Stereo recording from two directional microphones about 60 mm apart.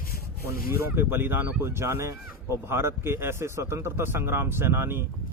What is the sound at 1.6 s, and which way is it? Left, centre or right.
Speech, right.